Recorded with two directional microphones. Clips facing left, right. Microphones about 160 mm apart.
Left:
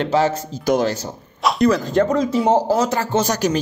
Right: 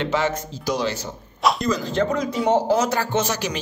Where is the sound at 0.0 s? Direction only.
35° left (ahead or behind).